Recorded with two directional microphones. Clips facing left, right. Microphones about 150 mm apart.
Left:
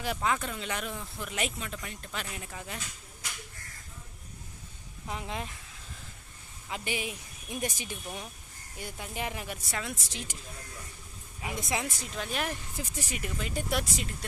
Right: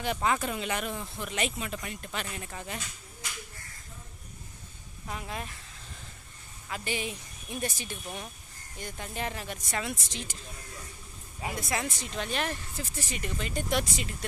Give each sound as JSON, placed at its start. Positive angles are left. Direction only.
{"t": 0.0, "sound": "speech", "side_deg": 0}
{"t": 5.0, "sound": "speech", "side_deg": 20}
{"t": 6.7, "sound": "speech", "side_deg": 20}
{"t": 6.9, "sound": "a woman's voice", "side_deg": 10}
{"t": 11.5, "sound": "speech", "side_deg": 20}
{"t": 11.8, "sound": "speech", "side_deg": 5}